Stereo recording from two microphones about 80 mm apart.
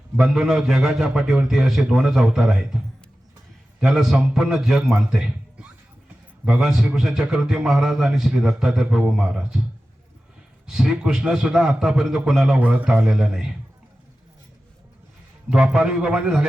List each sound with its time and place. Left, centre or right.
0.2 s a man's voice: centre
3.8 s a man's voice: centre
10.7 s a man's voice: centre
12.5 s a man's voice: centre
12.9 s a man's voice: centre
15.4 s a man's voice: centre